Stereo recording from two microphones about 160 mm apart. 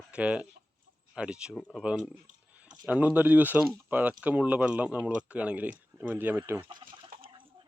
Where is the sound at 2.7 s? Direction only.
10° right (ahead or behind).